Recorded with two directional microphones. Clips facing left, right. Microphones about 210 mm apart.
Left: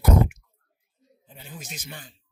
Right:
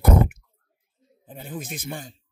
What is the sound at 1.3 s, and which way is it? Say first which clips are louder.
Speech: right 8 dB; 55° right (ahead or behind).